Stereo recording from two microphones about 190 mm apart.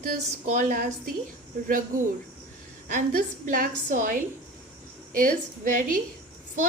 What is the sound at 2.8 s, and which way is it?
A woman's voice, 50° right (ahead or behind).